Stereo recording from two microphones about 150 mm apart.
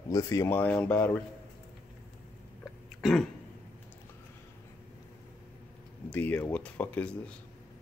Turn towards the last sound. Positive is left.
turn(degrees=10)  # may be behind; listen again after turning